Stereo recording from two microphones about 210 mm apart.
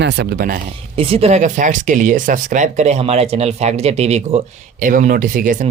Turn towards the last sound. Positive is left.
turn(degrees=-40)  # may be behind; listen again after turning